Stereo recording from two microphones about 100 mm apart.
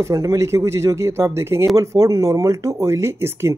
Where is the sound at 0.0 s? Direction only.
30° right (ahead or behind).